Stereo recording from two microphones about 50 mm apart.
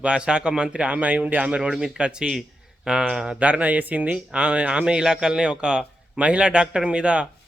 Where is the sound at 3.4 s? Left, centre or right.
Right.